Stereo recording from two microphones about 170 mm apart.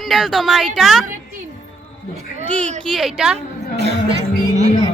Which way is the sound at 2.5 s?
5° left (ahead or behind).